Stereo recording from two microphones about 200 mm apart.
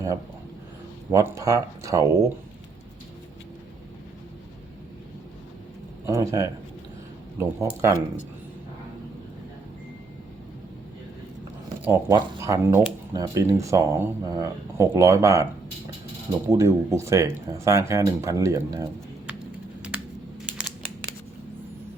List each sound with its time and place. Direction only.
1.1 s speech: 15° right (ahead or behind)
6.1 s speech: 15° right (ahead or behind)
11.9 s speech: 15° right (ahead or behind)
16.5 s speech: 15° right (ahead or behind)